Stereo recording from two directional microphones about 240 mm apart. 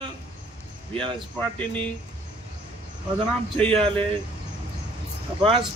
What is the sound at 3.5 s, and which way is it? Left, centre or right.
Speech, centre.